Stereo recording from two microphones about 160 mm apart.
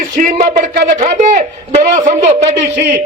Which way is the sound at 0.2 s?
50° right (ahead or behind).